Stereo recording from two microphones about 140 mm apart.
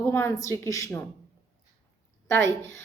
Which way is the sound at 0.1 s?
20° left (ahead or behind).